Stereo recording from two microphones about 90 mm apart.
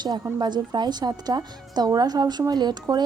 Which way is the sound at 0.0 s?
55° right (ahead or behind).